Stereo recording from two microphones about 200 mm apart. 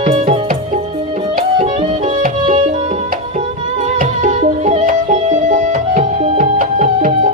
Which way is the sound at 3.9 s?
35° right (ahead or behind).